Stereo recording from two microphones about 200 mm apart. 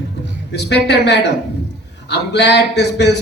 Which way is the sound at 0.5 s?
60° left (ahead or behind).